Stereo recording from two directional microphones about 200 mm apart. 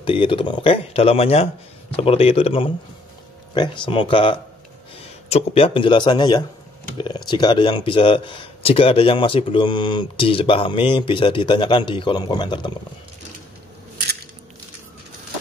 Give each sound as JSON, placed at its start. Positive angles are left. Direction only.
{"t": 0.0, "sound": "speech", "side_deg": 25}